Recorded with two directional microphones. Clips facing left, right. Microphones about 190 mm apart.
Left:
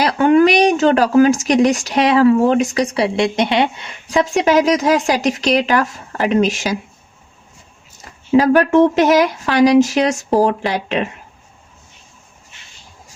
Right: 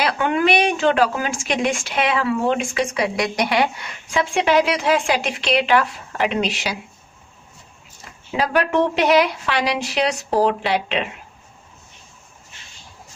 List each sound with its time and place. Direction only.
0.0 s speech: 40° left (ahead or behind)
8.4 s speech: 45° left (ahead or behind)